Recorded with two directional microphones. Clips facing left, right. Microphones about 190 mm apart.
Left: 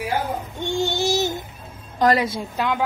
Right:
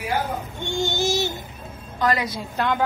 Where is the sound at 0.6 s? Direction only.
35° left (ahead or behind).